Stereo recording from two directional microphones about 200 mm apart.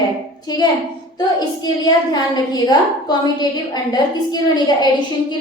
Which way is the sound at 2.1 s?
20° left (ahead or behind).